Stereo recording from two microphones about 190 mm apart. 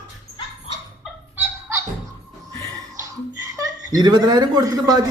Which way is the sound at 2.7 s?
15° right (ahead or behind).